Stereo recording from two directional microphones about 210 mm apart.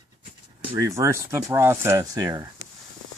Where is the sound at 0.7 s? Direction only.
15° right (ahead or behind).